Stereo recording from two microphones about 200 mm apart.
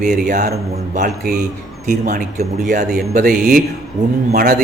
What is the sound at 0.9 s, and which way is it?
Speech, 45° right (ahead or behind).